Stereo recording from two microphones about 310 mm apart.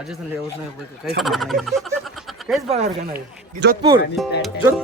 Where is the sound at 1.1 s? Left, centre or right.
Centre.